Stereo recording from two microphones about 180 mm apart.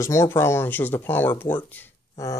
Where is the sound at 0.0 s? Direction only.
15° left (ahead or behind).